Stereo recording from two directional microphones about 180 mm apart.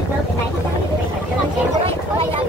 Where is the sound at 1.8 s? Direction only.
30° right (ahead or behind).